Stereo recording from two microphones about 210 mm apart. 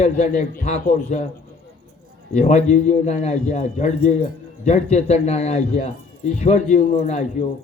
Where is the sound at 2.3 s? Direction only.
30° left (ahead or behind).